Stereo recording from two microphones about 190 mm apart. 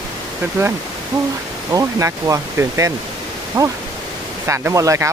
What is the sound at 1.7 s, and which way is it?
Speech, 15° right (ahead or behind).